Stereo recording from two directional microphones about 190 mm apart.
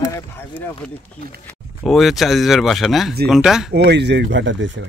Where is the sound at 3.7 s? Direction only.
60° right (ahead or behind).